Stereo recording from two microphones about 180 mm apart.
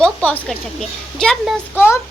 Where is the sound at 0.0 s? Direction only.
10° left (ahead or behind).